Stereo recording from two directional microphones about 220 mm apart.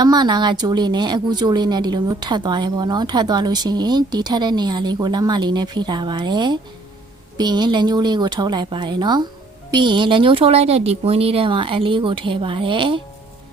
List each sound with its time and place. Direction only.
0.0 s a woman's voice: 20° right (ahead or behind)